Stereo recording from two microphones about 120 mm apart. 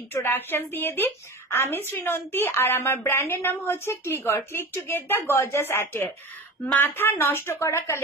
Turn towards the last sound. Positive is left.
turn(degrees=20)  # may be behind; listen again after turning